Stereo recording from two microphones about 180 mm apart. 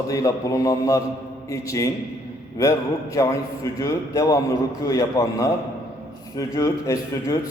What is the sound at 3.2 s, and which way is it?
A man's voice, 15° left (ahead or behind).